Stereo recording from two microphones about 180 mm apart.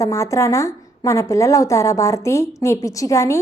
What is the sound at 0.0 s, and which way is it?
A woman's voice, 15° left (ahead or behind).